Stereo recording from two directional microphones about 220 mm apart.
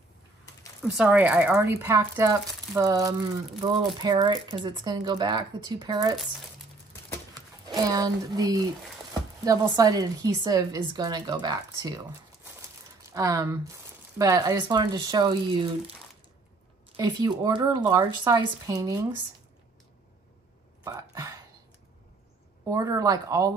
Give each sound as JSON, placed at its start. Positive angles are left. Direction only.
{"t": 0.9, "sound": "a woman's voice", "side_deg": -5}
{"t": 7.3, "sound": "a woman's voice", "side_deg": -15}
{"t": 13.0, "sound": "a woman's voice", "side_deg": -15}
{"t": 16.9, "sound": "a woman's voice", "side_deg": -20}
{"t": 20.8, "sound": "a sound", "side_deg": -15}
{"t": 22.7, "sound": "a woman's voice", "side_deg": -15}